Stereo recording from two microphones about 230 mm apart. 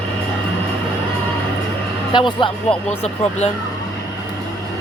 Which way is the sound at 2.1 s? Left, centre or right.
Centre.